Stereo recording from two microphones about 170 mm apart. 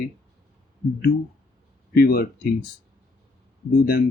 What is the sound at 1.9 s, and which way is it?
Speech, 65° left (ahead or behind).